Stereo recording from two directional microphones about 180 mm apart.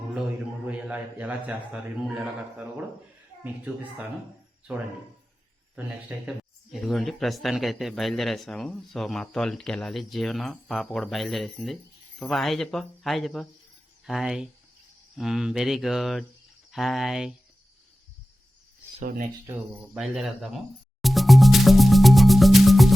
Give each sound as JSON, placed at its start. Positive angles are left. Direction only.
{"t": 0.7, "sound": "a man's voice", "side_deg": -10}
{"t": 4.7, "sound": "speech", "side_deg": -10}
{"t": 19.0, "sound": "speech", "side_deg": -50}
{"t": 19.5, "sound": "speech", "side_deg": -10}
{"t": 20.1, "sound": "speech", "side_deg": 0}
{"t": 21.0, "sound": "music", "side_deg": 0}